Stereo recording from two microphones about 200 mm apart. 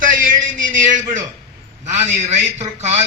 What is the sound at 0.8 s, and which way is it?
A man's voice, 40° right (ahead or behind).